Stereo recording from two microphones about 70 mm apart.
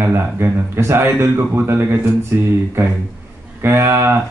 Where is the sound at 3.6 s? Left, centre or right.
Right.